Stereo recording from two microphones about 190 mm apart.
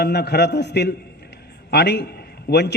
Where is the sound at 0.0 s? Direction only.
60° left (ahead or behind).